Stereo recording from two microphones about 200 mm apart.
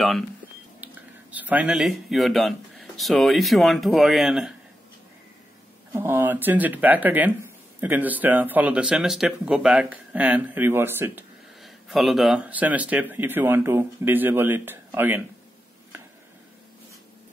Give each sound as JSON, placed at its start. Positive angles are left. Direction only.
{"t": 0.8, "sound": "whispering", "side_deg": -10}
{"t": 1.3, "sound": "speech", "side_deg": -10}
{"t": 5.9, "sound": "speech", "side_deg": -10}